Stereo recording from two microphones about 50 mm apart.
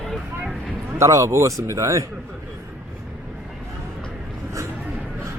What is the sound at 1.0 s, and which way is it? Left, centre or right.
Speech, right.